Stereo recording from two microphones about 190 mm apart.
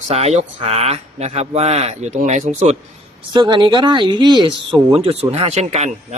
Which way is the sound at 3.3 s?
25° right (ahead or behind).